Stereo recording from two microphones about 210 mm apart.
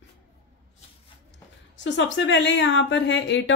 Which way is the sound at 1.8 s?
60° left (ahead or behind).